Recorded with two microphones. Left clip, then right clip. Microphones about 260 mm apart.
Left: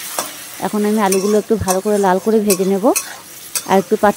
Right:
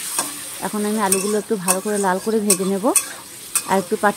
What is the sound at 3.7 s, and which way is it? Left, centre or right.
Stir, left.